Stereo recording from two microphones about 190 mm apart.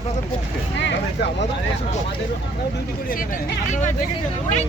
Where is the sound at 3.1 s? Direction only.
50° left (ahead or behind).